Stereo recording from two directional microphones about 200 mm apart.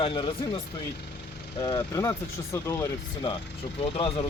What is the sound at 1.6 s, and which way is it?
Speech, 15° left (ahead or behind).